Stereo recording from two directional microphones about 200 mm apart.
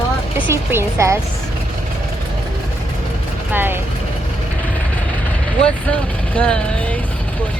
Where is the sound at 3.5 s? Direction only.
10° right (ahead or behind).